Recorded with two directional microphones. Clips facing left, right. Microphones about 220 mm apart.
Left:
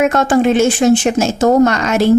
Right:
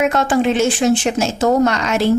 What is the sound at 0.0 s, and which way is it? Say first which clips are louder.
Speech: left 3 dB; 45° left (ahead or behind).